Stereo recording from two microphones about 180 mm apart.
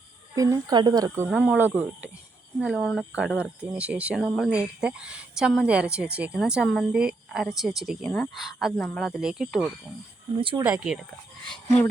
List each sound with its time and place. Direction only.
0.3 s speech: 20° right (ahead or behind); by 9.6 s centre (ahead or behind)
10.3 s speech: 30° right (ahead or behind)
10.6 s speech: 5° right (ahead or behind)